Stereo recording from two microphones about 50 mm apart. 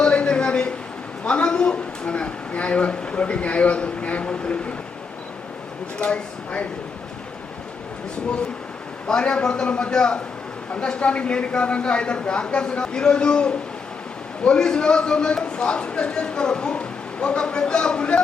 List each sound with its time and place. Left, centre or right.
0.0 s a sound: left
1.2 s a woman's voice: left
6.1 s a man's voice: left
9.0 s a man's voice: centre